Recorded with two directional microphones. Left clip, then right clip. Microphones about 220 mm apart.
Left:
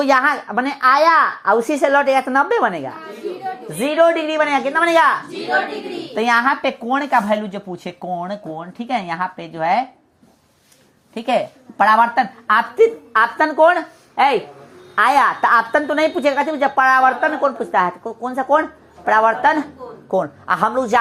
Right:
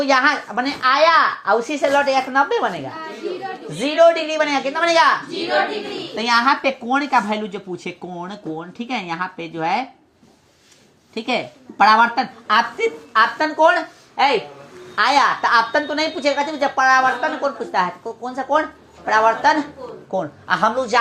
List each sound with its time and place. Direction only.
0.0 s a woman's voice: 40° left (ahead or behind)
1.8 s a woman's voice: 35° left (ahead or behind)
6.1 s a woman's voice: 35° left (ahead or behind)
11.8 s a woman's voice: 30° left (ahead or behind)